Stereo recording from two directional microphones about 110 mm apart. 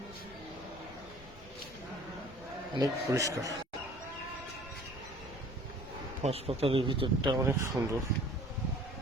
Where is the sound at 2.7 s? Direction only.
30° right (ahead or behind).